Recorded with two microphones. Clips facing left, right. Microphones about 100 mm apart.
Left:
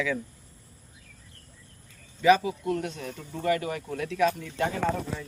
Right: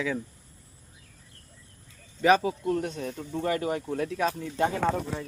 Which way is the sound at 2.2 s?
40° right (ahead or behind).